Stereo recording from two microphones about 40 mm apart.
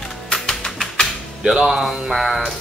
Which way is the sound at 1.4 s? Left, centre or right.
Centre.